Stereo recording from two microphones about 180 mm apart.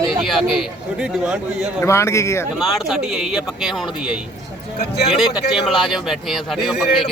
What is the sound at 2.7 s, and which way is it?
Speech, centre (ahead or behind).